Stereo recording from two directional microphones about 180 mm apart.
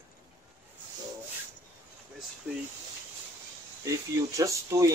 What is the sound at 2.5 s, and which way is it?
Speech, 10° right (ahead or behind).